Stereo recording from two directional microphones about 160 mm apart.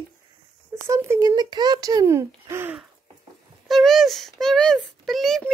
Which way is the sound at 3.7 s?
Centre (ahead or behind).